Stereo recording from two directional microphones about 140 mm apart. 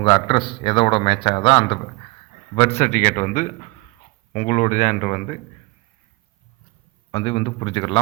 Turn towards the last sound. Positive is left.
turn(degrees=35)  # may be behind; listen again after turning